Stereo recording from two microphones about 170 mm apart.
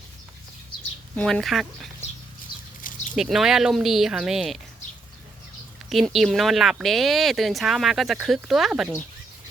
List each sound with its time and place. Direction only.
1.1 s speech: 5° left (ahead or behind)
2.8 s a sound: 50° left (ahead or behind)
3.2 s speech: centre (ahead or behind)
5.9 s speech: centre (ahead or behind)